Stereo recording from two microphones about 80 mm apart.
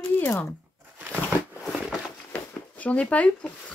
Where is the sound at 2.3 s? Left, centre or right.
Centre.